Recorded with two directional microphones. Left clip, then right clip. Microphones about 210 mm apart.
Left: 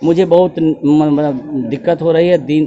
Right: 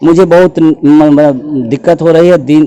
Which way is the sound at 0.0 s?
50° right (ahead or behind).